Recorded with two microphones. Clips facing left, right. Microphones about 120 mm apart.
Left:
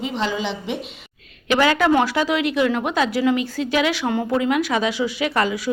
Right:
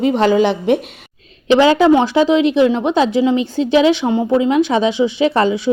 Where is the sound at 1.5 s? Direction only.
25° right (ahead or behind).